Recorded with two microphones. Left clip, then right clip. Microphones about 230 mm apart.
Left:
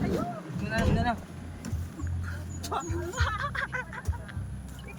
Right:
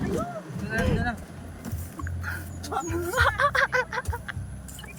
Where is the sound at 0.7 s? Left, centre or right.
Centre.